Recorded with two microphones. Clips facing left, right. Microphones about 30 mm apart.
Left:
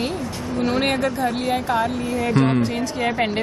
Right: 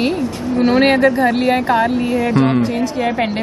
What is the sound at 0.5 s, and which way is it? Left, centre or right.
Speech, right.